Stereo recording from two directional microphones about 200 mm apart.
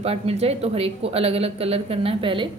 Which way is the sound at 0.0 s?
30° right (ahead or behind).